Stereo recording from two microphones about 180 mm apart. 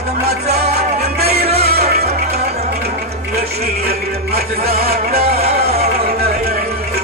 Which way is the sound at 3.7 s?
60° right (ahead or behind).